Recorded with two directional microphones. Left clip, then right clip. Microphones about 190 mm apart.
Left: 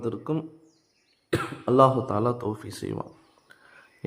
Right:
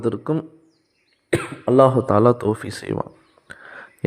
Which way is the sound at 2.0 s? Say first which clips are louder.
Right 10 dB; 30° right (ahead or behind).